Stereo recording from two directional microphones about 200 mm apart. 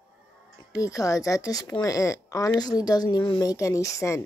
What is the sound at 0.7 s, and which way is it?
Speech, 15° left (ahead or behind).